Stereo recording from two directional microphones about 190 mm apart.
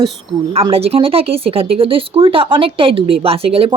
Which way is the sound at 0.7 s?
30° right (ahead or behind).